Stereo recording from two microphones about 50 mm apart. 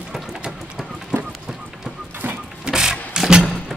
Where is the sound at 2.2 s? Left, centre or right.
Right.